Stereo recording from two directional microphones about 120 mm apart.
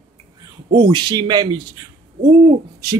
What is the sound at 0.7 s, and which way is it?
Speech, 35° right (ahead or behind).